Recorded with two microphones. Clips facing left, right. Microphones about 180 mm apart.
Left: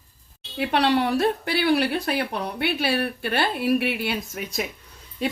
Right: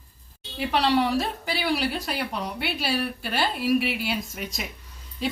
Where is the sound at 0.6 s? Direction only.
60° left (ahead or behind).